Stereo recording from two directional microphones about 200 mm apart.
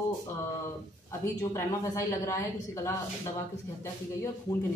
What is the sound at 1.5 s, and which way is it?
A woman's voice, 15° left (ahead or behind).